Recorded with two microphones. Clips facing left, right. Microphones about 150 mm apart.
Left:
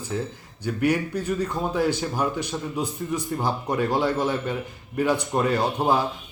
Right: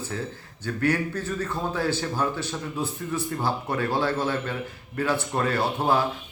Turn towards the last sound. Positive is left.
turn(degrees=15)  # may be behind; listen again after turning